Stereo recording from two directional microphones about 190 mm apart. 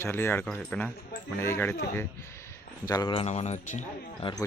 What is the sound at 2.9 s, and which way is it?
Speech, 20° left (ahead or behind).